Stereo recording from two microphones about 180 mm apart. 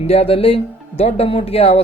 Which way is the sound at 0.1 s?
35° left (ahead or behind).